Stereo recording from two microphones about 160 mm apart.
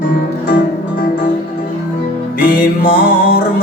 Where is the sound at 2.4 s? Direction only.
65° left (ahead or behind).